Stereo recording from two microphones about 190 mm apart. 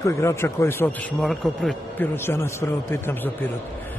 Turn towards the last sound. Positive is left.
turn(degrees=15)  # may be behind; listen again after turning